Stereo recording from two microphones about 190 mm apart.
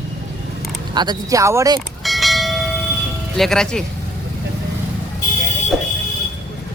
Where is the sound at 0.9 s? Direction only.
20° right (ahead or behind).